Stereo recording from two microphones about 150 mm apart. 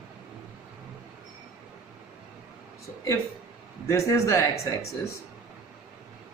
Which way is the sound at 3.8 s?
20° left (ahead or behind).